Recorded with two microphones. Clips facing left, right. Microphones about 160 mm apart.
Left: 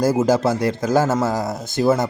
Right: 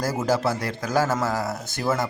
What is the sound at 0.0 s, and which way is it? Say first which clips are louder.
Speech: left 6 dB; 25° left (ahead or behind).